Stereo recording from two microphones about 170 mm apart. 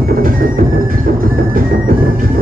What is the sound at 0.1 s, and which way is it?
Music, 55° right (ahead or behind).